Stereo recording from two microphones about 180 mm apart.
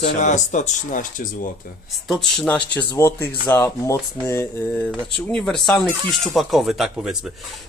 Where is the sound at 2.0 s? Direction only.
5° left (ahead or behind).